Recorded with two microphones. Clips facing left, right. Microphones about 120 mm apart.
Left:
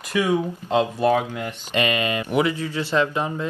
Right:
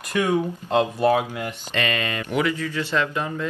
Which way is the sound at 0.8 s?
5° right (ahead or behind).